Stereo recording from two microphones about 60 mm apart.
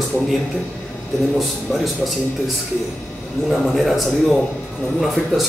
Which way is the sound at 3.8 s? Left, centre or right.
Centre.